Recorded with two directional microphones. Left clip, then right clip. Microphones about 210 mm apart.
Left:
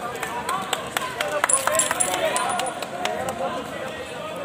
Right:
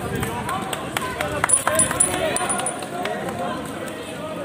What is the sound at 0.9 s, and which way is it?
Run, 40° left (ahead or behind).